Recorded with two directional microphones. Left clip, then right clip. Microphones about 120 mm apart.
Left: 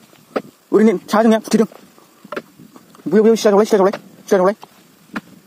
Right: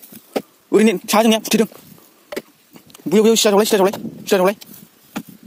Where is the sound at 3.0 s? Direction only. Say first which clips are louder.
Left 1 dB; 40° right (ahead or behind).